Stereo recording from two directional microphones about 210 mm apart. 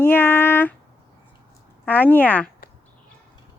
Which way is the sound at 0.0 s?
10° left (ahead or behind).